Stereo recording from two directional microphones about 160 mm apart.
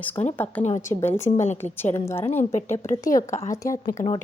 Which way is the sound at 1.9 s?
15° left (ahead or behind).